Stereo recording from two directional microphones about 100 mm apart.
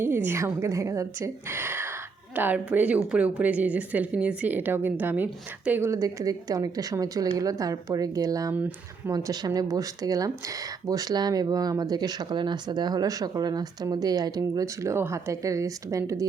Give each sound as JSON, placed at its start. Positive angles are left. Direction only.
{"t": 0.0, "sound": "a woman's voice", "side_deg": -25}
{"t": 5.9, "sound": "speech", "side_deg": -35}